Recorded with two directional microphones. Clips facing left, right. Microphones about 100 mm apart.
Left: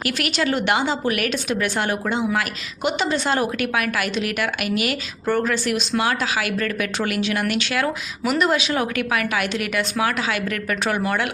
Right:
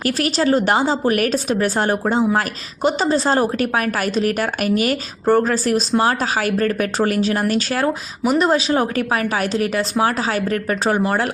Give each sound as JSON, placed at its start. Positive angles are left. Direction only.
{"t": 0.0, "sound": "a woman's voice", "side_deg": -35}